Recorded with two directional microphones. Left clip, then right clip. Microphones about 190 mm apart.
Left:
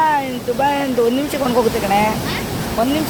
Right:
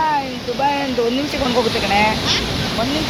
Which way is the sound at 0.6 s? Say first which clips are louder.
Left 1 dB; 30° left (ahead or behind).